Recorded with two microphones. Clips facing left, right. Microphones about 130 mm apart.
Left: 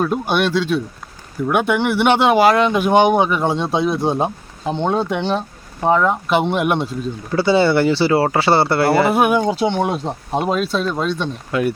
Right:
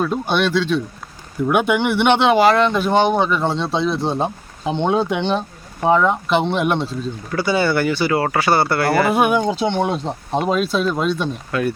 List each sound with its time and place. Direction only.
0.0 s speech: 10° left (ahead or behind)
1.5 s speech: centre (ahead or behind)
4.6 s speech: centre (ahead or behind)
7.3 s speech: 25° left (ahead or behind)
9.0 s speech: 5° left (ahead or behind)
11.5 s speech: 20° left (ahead or behind)